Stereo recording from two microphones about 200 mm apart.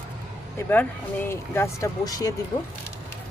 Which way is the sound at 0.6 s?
10° left (ahead or behind).